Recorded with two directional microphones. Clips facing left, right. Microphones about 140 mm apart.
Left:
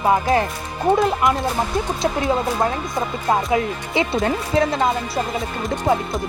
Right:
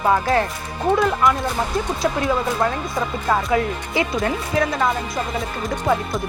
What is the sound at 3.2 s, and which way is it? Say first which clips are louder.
Speech: left 1 dB; 25° left (ahead or behind).